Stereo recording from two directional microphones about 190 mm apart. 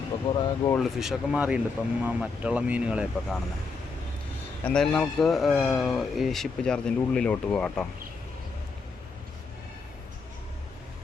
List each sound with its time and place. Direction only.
0.3 s speech: 20° left (ahead or behind)
0.8 s a man's voice: centre (ahead or behind)
4.6 s a man's voice: 5° left (ahead or behind)